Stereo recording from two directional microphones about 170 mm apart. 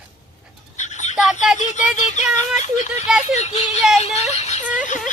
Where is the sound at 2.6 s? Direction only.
40° left (ahead or behind).